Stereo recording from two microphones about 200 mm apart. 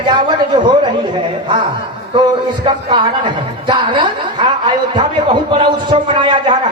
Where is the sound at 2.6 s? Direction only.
25° right (ahead or behind).